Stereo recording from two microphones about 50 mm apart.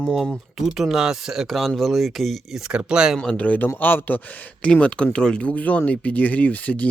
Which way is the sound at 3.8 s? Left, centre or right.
Left.